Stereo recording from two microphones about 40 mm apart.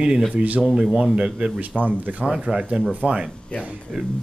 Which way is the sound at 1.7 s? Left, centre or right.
Left.